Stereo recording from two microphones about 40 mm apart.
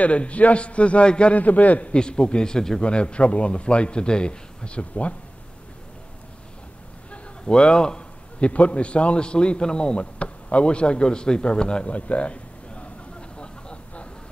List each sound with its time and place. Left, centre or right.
0.0 s a man's voice: left
1.4 s a man's voice: left
2.0 s a man's voice: left
2.8 s a man's voice: left
7.1 s a sound: left
8.5 s a man's voice: left
13.4 s vehicle: left